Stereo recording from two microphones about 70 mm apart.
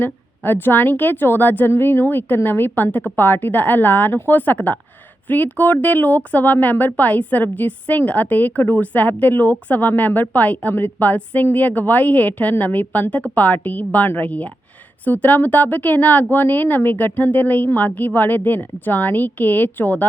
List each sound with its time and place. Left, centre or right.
0.0 s speech: left